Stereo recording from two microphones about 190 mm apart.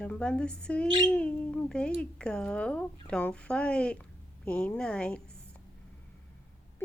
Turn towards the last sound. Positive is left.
turn(degrees=5)  # may be behind; listen again after turning